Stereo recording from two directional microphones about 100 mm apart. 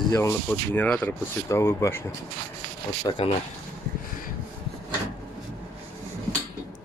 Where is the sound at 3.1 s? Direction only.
40° left (ahead or behind).